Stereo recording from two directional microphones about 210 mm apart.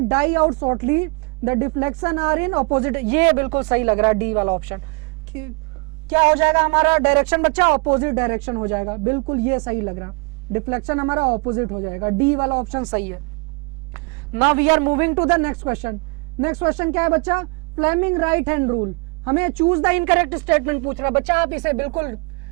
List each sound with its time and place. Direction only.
0.1 s a woman's voice: 10° right (ahead or behind)
6.1 s speech: 20° right (ahead or behind)
6.3 s a woman's voice: 10° right (ahead or behind)
11.3 s a woman's voice: 25° right (ahead or behind)